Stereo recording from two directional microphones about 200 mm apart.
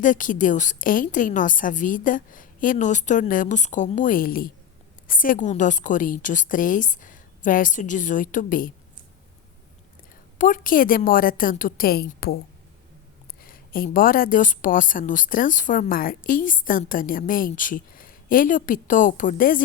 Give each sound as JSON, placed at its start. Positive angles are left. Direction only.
{"t": 0.0, "sound": "a woman's voice", "side_deg": 40}
{"t": 10.3, "sound": "a woman's voice", "side_deg": 40}
{"t": 13.4, "sound": "a woman's voice", "side_deg": 45}